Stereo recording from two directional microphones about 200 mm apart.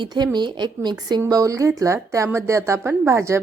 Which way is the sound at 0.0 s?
20° right (ahead or behind).